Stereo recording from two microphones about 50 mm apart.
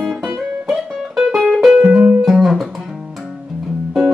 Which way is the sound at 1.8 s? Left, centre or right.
Right.